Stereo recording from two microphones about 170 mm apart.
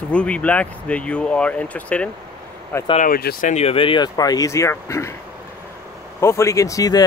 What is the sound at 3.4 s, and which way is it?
Speech, 40° left (ahead or behind).